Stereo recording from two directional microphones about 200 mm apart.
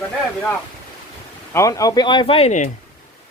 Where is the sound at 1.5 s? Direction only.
15° left (ahead or behind); by 2.7 s 35° left (ahead or behind).